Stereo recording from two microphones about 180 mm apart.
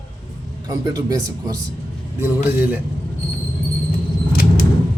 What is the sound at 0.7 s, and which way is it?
Speech, 20° right (ahead or behind).